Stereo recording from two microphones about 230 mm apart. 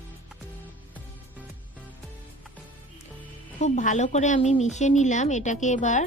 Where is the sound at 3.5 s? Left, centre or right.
Left.